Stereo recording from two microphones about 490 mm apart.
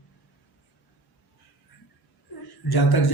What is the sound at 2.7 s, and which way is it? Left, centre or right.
Speech, left.